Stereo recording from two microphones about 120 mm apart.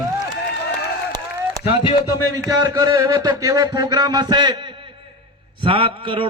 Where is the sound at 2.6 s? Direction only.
30° right (ahead or behind).